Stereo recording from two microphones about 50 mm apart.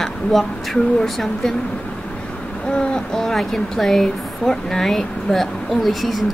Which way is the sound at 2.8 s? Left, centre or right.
Centre.